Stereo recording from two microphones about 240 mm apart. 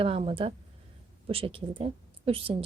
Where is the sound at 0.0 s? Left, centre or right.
Right.